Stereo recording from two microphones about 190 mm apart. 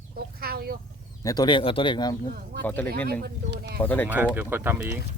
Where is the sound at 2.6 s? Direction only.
10° left (ahead or behind).